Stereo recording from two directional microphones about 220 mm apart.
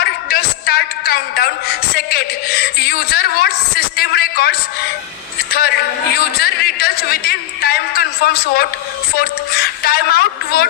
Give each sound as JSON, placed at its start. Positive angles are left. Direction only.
{"t": 0.0, "sound": "a man's voice", "side_deg": 45}